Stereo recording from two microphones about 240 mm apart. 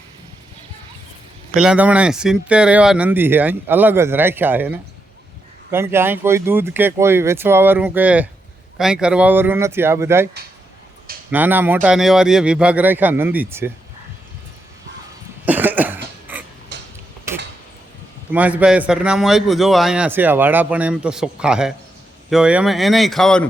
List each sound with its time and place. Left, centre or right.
1.5 s speech: centre
11.3 s speech: centre
15.4 s cough: centre
16.7 s tick-tock: right
18.3 s a man's voice: centre